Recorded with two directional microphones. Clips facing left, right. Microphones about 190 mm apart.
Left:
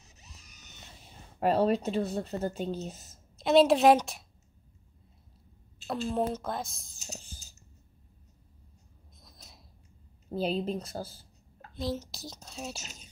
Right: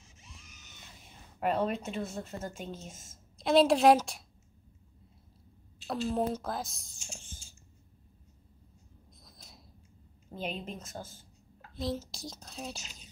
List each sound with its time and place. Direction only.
0.0 s a sound: 40° left (ahead or behind)
3.3 s speech: centre (ahead or behind)
5.9 s speech: centre (ahead or behind)
7.0 s a sound: 40° left (ahead or behind)
10.3 s speech: 35° left (ahead or behind)
11.7 s speech: centre (ahead or behind)